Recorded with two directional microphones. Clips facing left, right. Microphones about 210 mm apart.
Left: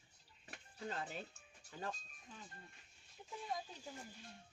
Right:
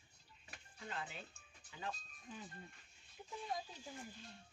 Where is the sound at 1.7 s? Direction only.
45° left (ahead or behind).